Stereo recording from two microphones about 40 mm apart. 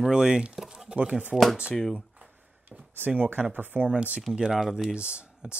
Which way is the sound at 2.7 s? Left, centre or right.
Right.